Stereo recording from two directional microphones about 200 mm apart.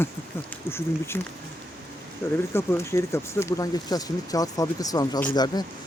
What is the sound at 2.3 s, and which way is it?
Speech, 10° left (ahead or behind).